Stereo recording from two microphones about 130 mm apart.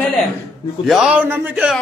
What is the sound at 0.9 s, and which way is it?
Speech, 5° right (ahead or behind).